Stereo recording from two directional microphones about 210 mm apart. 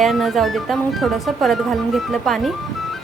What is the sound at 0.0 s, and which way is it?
Speech, centre (ahead or behind).